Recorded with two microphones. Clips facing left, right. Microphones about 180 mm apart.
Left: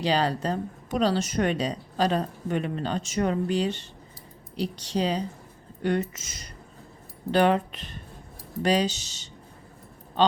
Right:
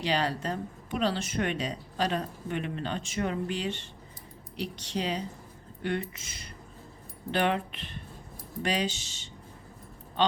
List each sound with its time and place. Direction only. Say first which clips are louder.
0.0 s a woman's voice: left 4 dB; 35° left (ahead or behind)